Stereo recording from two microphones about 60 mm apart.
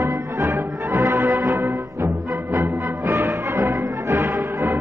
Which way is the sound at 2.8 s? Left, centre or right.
Right.